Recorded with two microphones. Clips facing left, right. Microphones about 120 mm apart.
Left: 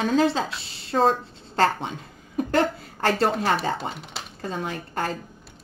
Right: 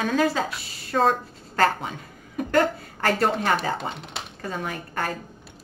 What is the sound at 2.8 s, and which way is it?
Speech, 30° left (ahead or behind).